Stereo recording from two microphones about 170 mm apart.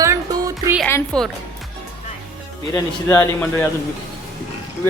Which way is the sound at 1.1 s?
5° left (ahead or behind).